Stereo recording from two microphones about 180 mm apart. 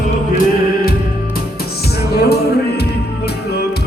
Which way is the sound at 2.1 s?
60° left (ahead or behind).